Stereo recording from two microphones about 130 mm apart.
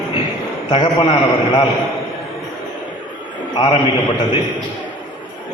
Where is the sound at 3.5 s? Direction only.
40° left (ahead or behind).